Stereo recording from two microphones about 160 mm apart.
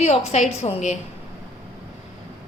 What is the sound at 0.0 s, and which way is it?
Speech, 40° left (ahead or behind).